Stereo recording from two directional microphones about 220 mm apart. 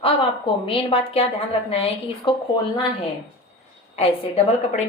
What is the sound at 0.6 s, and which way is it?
Speech, 25° left (ahead or behind).